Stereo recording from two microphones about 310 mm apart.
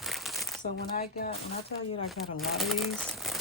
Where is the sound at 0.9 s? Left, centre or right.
Left.